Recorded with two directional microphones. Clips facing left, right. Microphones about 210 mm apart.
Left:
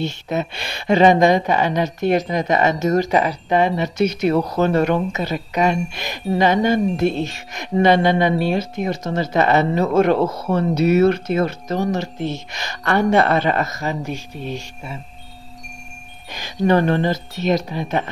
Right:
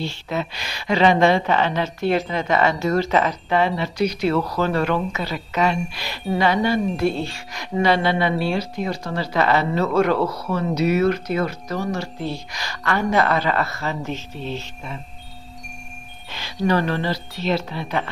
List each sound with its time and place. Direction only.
0.0 s speech: 20° left (ahead or behind)
16.3 s a sound: 15° left (ahead or behind)
16.6 s speech: 50° left (ahead or behind)
16.9 s speech: 20° left (ahead or behind)